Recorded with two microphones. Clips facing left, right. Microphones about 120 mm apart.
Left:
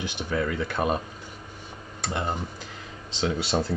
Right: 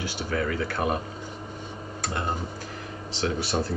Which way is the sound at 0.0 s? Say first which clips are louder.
Even; 20° left (ahead or behind).